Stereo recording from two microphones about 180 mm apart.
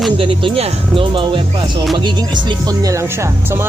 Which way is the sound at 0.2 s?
30° right (ahead or behind).